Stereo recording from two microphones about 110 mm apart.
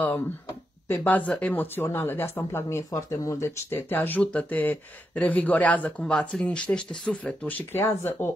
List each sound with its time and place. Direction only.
0.8 s speech: 20° left (ahead or behind)